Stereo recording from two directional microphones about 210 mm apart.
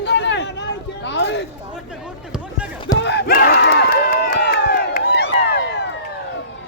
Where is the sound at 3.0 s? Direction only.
50° left (ahead or behind).